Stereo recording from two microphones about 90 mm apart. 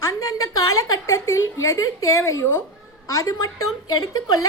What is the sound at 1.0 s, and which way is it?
A woman's voice, 35° left (ahead or behind).